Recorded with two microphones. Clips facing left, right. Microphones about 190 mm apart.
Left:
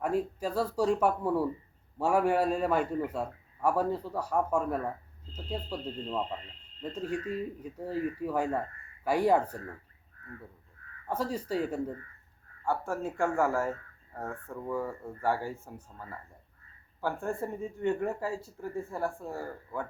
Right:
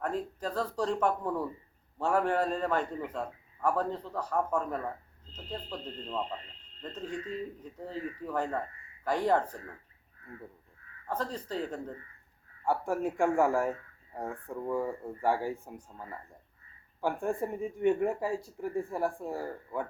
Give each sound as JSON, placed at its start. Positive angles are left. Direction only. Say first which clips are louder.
{"t": 0.0, "sound": "a man's voice", "louder": "left 3 dB", "side_deg": 10}
{"t": 11.1, "sound": "a man's voice", "louder": "left 3 dB", "side_deg": 10}
{"t": 12.6, "sound": "speech", "louder": "right 2 dB", "side_deg": -15}